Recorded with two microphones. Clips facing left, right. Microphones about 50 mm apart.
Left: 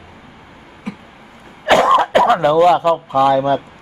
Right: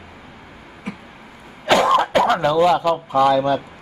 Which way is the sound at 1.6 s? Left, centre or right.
Left.